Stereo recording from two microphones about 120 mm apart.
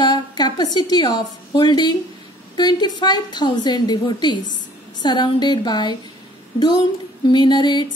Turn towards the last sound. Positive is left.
turn(degrees=40)  # may be behind; listen again after turning